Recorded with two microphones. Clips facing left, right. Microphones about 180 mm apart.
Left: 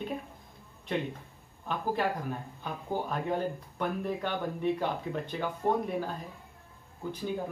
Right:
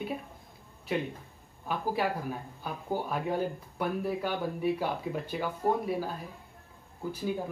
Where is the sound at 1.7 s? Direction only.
5° right (ahead or behind).